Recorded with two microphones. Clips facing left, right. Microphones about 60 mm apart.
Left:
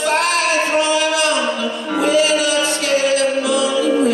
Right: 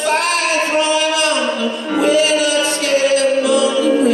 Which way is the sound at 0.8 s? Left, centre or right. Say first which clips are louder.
Right 1 dB; right.